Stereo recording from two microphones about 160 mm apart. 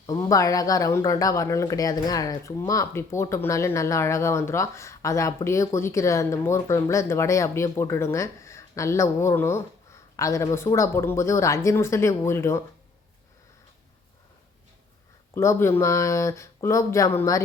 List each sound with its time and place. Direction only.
0.0 s speech: 20° left (ahead or behind)
15.4 s speech: 15° left (ahead or behind)